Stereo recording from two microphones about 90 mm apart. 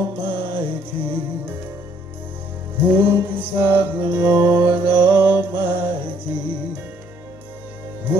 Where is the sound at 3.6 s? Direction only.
25° right (ahead or behind).